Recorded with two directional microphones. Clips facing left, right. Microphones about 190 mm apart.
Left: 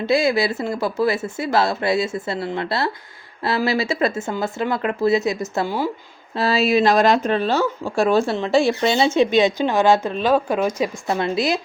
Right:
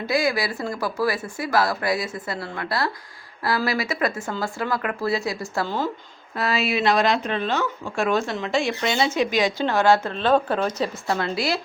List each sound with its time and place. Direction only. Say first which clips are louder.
0.0 s speech: left 5 dB; 25° left (ahead or behind)
6.3 s speech: left 6 dB; 30° left (ahead or behind)